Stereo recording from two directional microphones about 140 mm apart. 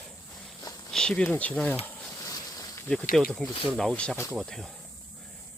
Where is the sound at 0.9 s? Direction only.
5° left (ahead or behind).